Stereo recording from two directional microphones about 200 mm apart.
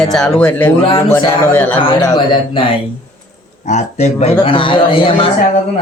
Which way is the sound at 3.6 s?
35° left (ahead or behind).